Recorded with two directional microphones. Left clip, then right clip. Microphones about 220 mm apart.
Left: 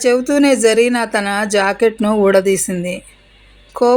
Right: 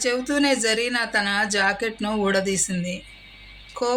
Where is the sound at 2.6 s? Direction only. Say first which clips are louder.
Left 8 dB; 40° left (ahead or behind).